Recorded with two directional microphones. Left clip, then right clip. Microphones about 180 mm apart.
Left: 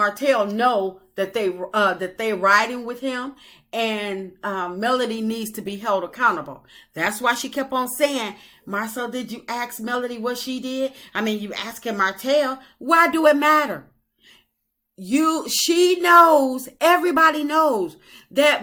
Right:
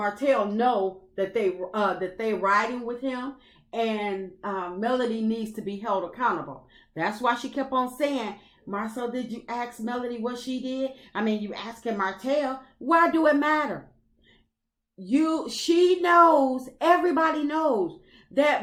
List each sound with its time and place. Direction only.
0.0 s a woman's voice: 20° left (ahead or behind)
15.0 s a woman's voice: 15° left (ahead or behind)